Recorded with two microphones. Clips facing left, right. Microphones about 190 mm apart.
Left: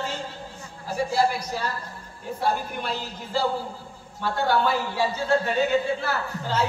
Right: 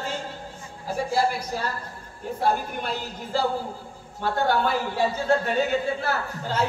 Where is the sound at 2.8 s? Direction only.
50° right (ahead or behind).